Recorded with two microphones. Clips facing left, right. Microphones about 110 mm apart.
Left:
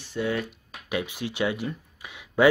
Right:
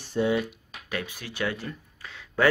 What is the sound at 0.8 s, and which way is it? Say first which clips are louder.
Speech: left 5 dB; 20° left (ahead or behind).